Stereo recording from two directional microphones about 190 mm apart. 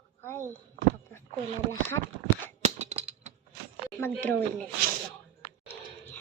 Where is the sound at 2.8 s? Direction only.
35° right (ahead or behind).